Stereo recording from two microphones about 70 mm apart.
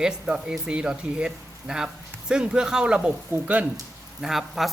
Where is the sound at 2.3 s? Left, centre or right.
Centre.